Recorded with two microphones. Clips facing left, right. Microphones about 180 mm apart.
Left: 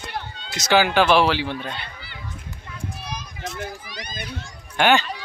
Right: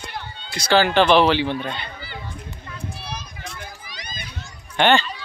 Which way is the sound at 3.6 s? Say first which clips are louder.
Left 5 dB; 60° left (ahead or behind).